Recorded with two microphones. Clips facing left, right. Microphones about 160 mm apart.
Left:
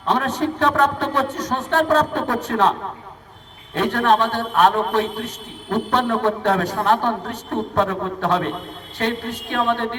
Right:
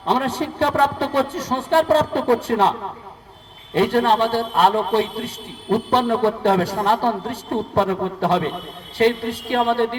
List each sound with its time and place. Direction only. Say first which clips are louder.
0.0 s a man's voice: even; 30° right (ahead or behind)
3.8 s a man's voice: right 1 dB; 30° right (ahead or behind)